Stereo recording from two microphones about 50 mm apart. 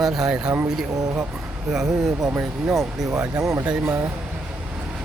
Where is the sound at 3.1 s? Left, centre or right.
Right.